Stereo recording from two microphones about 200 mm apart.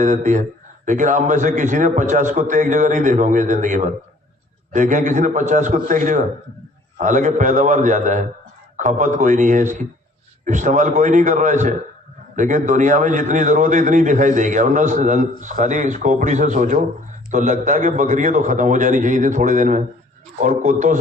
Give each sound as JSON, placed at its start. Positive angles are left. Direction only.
{"t": 0.0, "sound": "a man's voice", "side_deg": -40}